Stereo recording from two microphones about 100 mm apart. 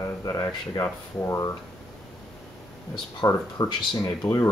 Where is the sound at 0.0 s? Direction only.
35° left (ahead or behind).